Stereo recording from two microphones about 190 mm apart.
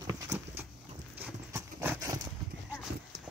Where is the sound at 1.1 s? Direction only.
10° right (ahead or behind).